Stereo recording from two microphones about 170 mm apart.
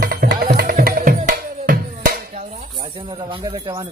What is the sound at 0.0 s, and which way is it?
Music, 60° right (ahead or behind).